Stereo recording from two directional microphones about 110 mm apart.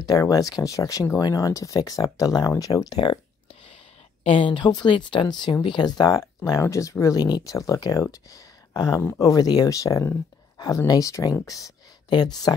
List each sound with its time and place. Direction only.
0.0 s speech: 35° left (ahead or behind)
4.2 s speech: 55° left (ahead or behind); by 11.7 s 30° left (ahead or behind)
12.1 s speech: 40° left (ahead or behind)